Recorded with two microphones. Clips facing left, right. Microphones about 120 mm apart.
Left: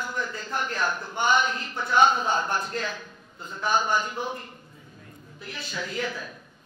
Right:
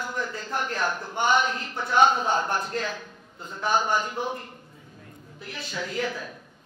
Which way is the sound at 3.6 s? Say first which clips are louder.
Even; 55° right (ahead or behind).